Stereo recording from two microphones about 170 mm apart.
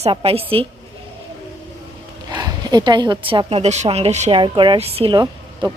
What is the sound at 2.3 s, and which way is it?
A woman's voice, 25° right (ahead or behind).